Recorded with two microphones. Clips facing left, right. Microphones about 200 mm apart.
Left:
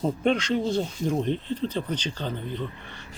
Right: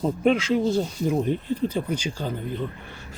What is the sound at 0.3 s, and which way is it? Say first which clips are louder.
Speech: right 4 dB; 5° right (ahead or behind).